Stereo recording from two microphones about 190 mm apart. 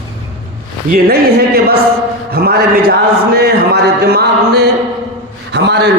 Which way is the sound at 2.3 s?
55° right (ahead or behind).